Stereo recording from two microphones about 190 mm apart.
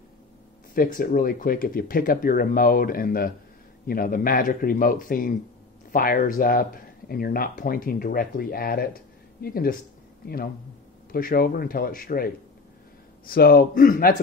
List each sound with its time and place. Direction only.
0.7 s speech: 50° left (ahead or behind)
13.3 s speech: 50° left (ahead or behind)